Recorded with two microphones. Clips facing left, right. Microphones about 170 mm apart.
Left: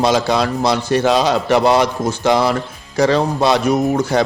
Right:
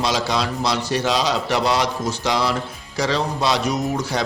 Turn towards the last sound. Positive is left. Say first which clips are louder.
# left 7 dB
turn(degrees=55)  # may be behind; listen again after turning